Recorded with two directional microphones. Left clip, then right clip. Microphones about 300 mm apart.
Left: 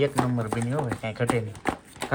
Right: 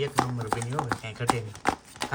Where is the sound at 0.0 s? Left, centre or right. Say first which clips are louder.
Left 3 dB; centre.